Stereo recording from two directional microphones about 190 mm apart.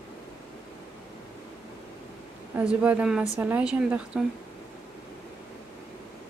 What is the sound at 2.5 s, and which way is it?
A woman's voice, 5° right (ahead or behind).